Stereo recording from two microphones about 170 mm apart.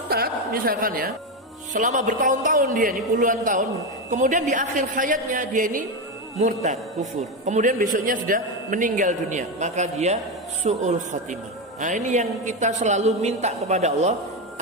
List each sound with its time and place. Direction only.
0.1 s a woman's voice: 60° right (ahead or behind)
1.7 s a man's voice: 45° right (ahead or behind)